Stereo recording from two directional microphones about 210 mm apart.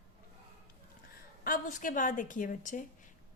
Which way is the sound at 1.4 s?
40° left (ahead or behind).